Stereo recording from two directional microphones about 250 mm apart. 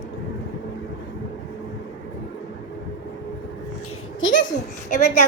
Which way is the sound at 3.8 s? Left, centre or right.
Left.